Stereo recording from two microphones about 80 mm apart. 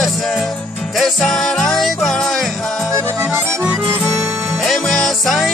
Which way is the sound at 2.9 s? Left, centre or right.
Right.